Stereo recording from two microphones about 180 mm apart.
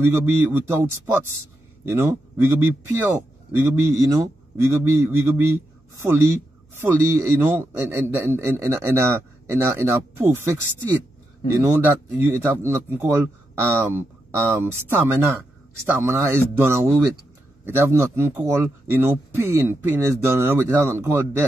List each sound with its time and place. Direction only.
0.0 s a man's voice: 10° right (ahead or behind)